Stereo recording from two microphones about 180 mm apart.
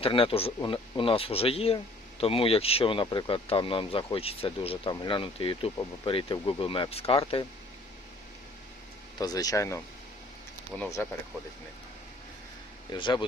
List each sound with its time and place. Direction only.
0.0 s speech: 30° left (ahead or behind)
9.1 s speech: 20° left (ahead or behind)
10.8 s speech: 15° left (ahead or behind)
12.9 s speech: 25° left (ahead or behind)